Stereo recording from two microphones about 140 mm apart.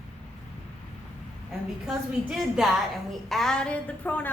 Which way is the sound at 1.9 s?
5° right (ahead or behind).